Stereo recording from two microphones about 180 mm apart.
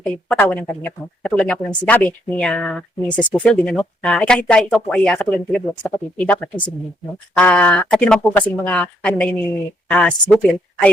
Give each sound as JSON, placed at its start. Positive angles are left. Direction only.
{"t": 0.0, "sound": "speech", "side_deg": 5}